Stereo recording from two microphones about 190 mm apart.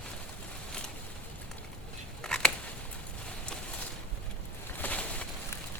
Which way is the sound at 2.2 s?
5° left (ahead or behind).